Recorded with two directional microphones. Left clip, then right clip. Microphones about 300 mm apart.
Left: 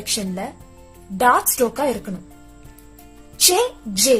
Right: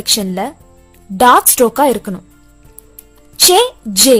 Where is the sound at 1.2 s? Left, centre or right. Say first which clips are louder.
Right 8 dB; right.